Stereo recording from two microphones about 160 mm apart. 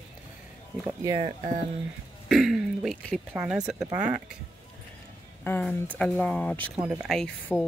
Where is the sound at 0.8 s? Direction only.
20° right (ahead or behind).